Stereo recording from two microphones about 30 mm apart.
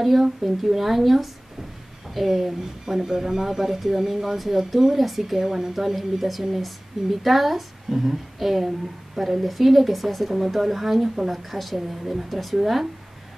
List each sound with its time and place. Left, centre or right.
0.4 s speech: centre